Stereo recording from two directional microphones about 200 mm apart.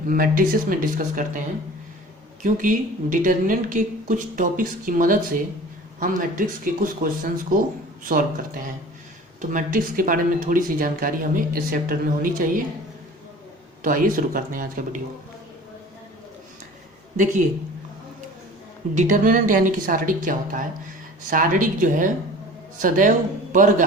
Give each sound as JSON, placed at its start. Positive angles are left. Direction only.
{"t": 0.1, "sound": "a woman's voice", "side_deg": -45}
{"t": 13.8, "sound": "speech", "side_deg": -45}
{"t": 18.9, "sound": "a woman's voice", "side_deg": -40}